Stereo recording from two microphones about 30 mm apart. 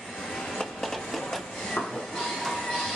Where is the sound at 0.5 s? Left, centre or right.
Centre.